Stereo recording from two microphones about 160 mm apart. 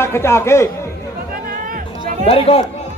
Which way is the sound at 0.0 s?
15° left (ahead or behind).